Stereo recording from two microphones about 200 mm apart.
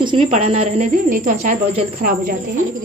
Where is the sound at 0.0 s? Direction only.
25° right (ahead or behind); by 2.3 s 45° right (ahead or behind).